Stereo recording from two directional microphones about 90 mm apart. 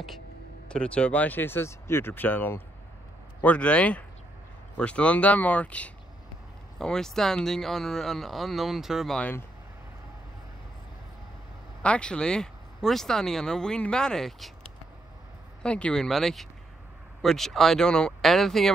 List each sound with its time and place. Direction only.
0.7 s speech: 10° left (ahead or behind)
11.8 s speech: 10° left (ahead or behind)
15.6 s speech: 10° left (ahead or behind)